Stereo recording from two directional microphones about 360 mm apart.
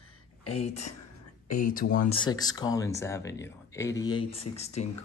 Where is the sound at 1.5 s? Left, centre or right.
Left.